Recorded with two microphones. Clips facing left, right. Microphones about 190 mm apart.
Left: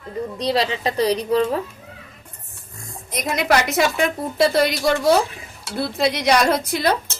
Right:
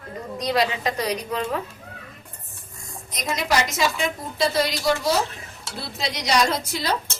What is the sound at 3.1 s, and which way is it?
A woman's voice, 60° left (ahead or behind).